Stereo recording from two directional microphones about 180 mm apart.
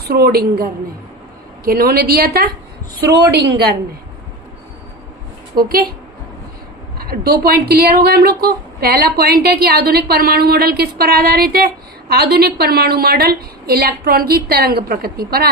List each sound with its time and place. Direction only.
0.1 s a woman's voice: 60° right (ahead or behind)
3.3 s a woman's voice: 70° right (ahead or behind)
5.5 s a woman's voice: 55° right (ahead or behind)
7.0 s a woman's voice: 55° right (ahead or behind)